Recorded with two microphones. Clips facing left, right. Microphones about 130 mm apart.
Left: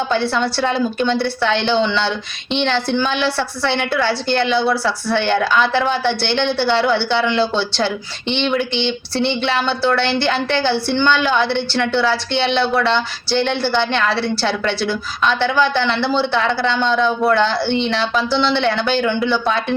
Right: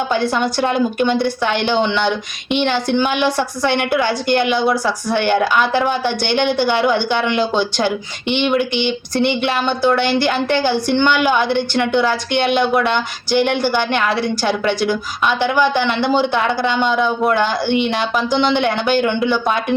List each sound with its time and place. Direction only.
0.3 s a woman's voice: 15° right (ahead or behind)